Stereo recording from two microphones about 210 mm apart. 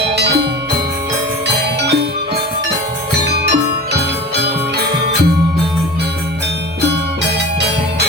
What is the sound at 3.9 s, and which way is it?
Jingle bell, 50° right (ahead or behind).